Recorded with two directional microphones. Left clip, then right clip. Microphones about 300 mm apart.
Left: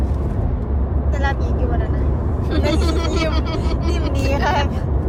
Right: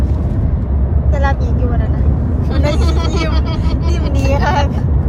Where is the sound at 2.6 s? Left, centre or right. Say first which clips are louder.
Right 1 dB; centre.